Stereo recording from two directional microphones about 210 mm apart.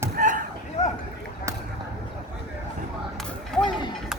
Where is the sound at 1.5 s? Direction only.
15° right (ahead or behind).